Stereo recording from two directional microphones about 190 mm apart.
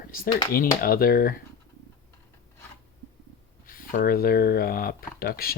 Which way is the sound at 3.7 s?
50° left (ahead or behind).